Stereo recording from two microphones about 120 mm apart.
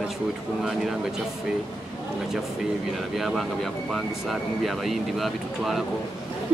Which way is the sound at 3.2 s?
Centre (ahead or behind).